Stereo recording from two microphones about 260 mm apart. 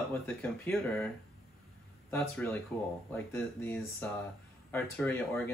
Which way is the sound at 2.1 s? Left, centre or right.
Centre.